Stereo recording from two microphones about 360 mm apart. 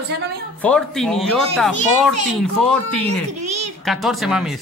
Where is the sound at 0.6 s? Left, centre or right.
Centre.